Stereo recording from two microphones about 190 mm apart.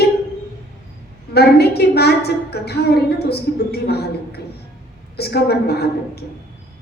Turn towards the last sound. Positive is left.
turn(degrees=60)  # may be behind; listen again after turning